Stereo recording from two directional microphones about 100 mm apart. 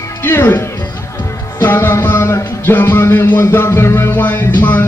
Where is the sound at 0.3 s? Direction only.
25° left (ahead or behind).